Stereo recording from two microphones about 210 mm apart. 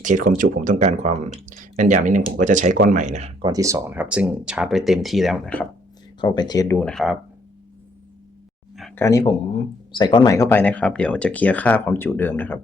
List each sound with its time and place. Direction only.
0.0 s speech: 35° right (ahead or behind)
3.5 s speech: 15° right (ahead or behind); by 5.6 s 5° left (ahead or behind)
6.1 s speech: 20° left (ahead or behind); by 7.2 s centre (ahead or behind)
9.0 s speech: 15° left (ahead or behind)